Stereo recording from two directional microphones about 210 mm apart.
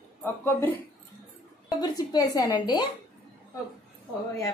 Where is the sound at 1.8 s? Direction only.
20° left (ahead or behind).